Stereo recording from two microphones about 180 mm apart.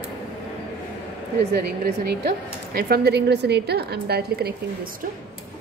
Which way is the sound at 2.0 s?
60° right (ahead or behind).